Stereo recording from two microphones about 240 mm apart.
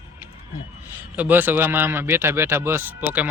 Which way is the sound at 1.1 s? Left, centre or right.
Centre.